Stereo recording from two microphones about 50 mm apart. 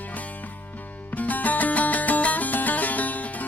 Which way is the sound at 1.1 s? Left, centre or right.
Left.